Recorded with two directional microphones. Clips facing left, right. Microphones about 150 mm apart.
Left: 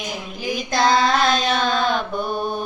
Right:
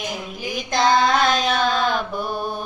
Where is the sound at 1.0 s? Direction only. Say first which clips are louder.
Even; 5° right (ahead or behind).